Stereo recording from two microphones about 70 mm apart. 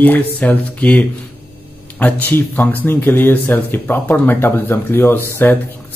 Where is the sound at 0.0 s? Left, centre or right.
Left.